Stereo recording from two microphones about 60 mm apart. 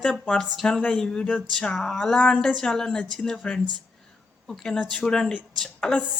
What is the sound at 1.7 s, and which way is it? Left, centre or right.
Speech, centre.